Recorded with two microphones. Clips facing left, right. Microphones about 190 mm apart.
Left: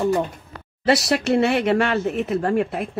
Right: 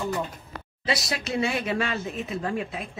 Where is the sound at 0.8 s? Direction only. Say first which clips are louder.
Left 10 dB; 70° left (ahead or behind).